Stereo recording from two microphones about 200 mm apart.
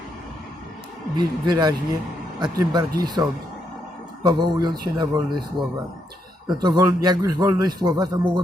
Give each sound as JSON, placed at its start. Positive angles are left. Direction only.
{"t": 1.1, "sound": "a man's voice", "side_deg": -20}
{"t": 6.5, "sound": "a man's voice", "side_deg": -20}